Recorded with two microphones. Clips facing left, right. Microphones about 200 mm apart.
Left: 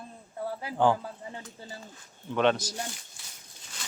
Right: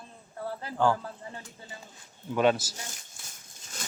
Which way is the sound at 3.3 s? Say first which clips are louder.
Right 2 dB; 45° right (ahead or behind).